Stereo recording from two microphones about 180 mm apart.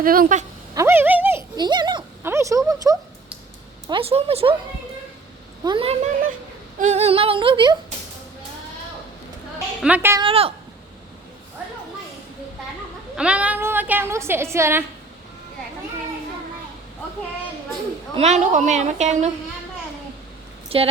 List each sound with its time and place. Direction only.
0.0 s speech: 50° right (ahead or behind)
0.7 s a sound: 15° right (ahead or behind)
2.6 s speech: 20° right (ahead or behind)
3.8 s a woman's voice: 30° right (ahead or behind)
5.6 s a woman's voice: 30° right (ahead or behind)
9.8 s a woman's voice: 10° right (ahead or behind)
10.2 s a woman's voice: 30° right (ahead or behind)
13.1 s a woman's voice: 5° right (ahead or behind)
18.1 s a woman's voice: 35° right (ahead or behind)
20.7 s speech: 30° right (ahead or behind)